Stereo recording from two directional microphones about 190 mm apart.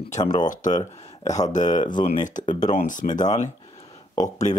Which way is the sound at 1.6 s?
25° left (ahead or behind).